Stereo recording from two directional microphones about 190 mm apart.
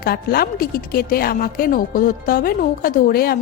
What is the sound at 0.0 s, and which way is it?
A woman's voice, 55° left (ahead or behind).